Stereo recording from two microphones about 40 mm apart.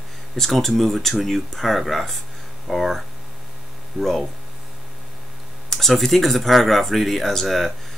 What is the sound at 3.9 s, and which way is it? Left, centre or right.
Speech, centre.